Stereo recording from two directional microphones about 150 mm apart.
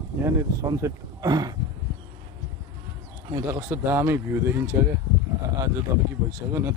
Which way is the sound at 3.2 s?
20° right (ahead or behind).